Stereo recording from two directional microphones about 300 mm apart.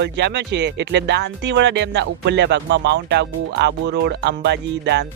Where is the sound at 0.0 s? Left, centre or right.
Right.